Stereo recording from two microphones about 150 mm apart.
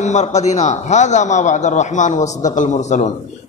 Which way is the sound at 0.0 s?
50° left (ahead or behind).